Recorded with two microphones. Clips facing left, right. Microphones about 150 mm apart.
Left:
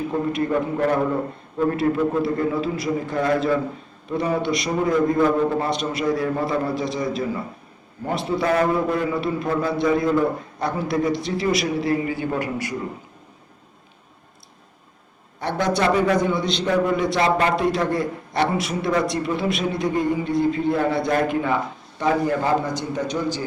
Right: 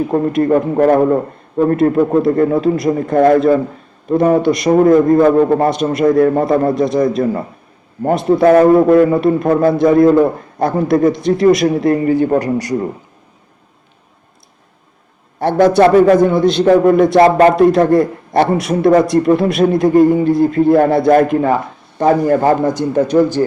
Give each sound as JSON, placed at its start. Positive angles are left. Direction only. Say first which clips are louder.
{"t": 0.1, "sound": "a man's voice", "louder": "right 9 dB", "side_deg": -50}
{"t": 6.7, "sound": "a man's voice", "louder": "right 11 dB", "side_deg": 0}
{"t": 7.0, "sound": "a man's voice", "louder": "right 10 dB", "side_deg": -50}
{"t": 15.4, "sound": "a man's voice", "louder": "right 12 dB", "side_deg": -55}
{"t": 21.3, "sound": "a man's voice", "louder": "right 8 dB", "side_deg": -45}